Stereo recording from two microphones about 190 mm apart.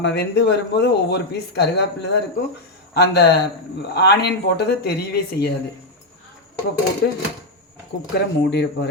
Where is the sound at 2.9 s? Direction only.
60° left (ahead or behind).